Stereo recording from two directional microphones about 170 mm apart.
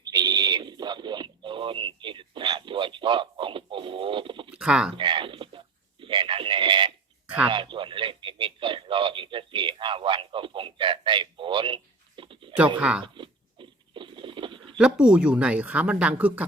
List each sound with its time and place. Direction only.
0.0 s owl: 20° right (ahead or behind)
4.5 s speech: 5° right (ahead or behind)
4.9 s sheep: 30° right (ahead or behind)
7.4 s radio: 30° right (ahead or behind)
13.1 s a sound: 30° right (ahead or behind)
14.8 s speech: 5° right (ahead or behind)